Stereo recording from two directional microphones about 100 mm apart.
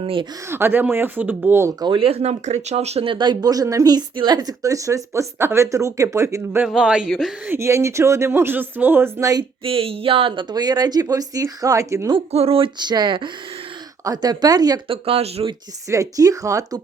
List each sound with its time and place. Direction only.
0.0 s speech: 65° right (ahead or behind)
0.4 s speech: 25° right (ahead or behind)
2.0 s a woman's voice: 80° right; by 6.7 s 25° right (ahead or behind)
6.7 s a woman's voice: 10° right (ahead or behind)
7.4 s speech: 25° right (ahead or behind)
9.2 s a woman's voice: 40° right (ahead or behind)
9.6 s a woman's voice: 70° right (ahead or behind)
10.5 s a woman's voice: 40° right (ahead or behind)
12.1 s a woman's voice: 80° right
12.8 s speech: 45° right (ahead or behind)
14.0 s a woman's voice: 40° right (ahead or behind)
14.8 s a woman's voice: 70° right (ahead or behind)
15.9 s a woman's voice: 35° right (ahead or behind)